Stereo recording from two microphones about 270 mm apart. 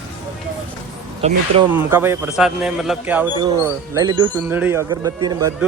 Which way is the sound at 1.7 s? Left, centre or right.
Centre.